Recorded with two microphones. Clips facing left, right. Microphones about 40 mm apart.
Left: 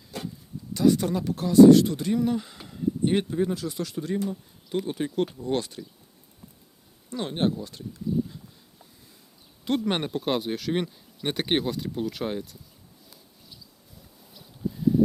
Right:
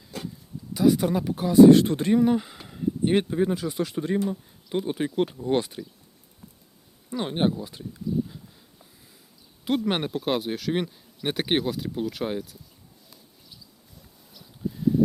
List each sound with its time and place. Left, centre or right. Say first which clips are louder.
0.7 s speech: right 1 dB; centre
1.7 s speech: right 1 dB; right; by 5.8 s centre
7.1 s speech: right 2 dB; centre
9.6 s speech: right 1 dB; centre
14.3 s a sound: even; centre